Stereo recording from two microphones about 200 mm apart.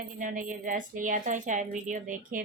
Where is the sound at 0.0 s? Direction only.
40° right (ahead or behind).